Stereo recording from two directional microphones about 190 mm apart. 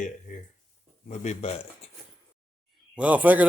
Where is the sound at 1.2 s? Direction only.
35° left (ahead or behind).